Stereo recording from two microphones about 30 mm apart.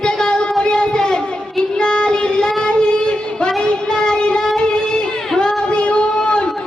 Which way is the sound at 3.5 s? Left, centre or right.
Left.